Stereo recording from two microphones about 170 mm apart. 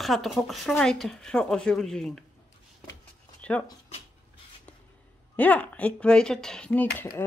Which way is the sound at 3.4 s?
10° left (ahead or behind).